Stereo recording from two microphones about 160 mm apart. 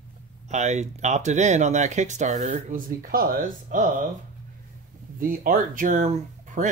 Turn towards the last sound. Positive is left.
turn(degrees=-50)  # may be behind; listen again after turning